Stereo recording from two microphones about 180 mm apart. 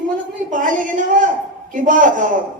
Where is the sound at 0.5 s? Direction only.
45° right (ahead or behind).